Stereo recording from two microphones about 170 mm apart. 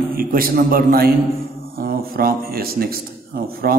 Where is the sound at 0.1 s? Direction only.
55° right (ahead or behind).